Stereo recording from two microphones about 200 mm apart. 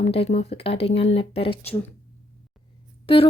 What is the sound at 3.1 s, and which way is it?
Speech, 25° left (ahead or behind).